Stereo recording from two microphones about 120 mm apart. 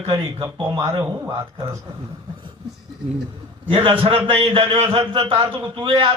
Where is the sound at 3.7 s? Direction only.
50° right (ahead or behind).